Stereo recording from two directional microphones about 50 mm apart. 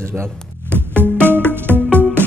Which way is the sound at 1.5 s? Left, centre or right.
Right.